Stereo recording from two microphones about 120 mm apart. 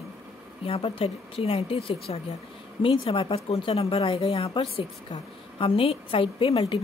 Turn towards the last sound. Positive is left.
turn(degrees=50)  # may be behind; listen again after turning